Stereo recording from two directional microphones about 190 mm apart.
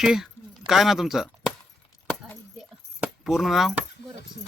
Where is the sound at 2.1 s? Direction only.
Centre (ahead or behind).